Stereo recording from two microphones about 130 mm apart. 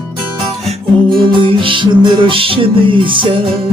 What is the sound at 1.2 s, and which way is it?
Music, 40° right (ahead or behind).